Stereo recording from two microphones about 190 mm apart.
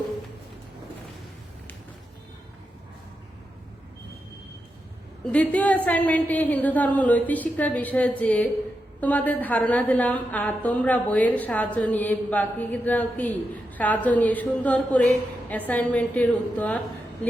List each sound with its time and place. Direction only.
5.2 s a woman's voice: 5° left (ahead or behind)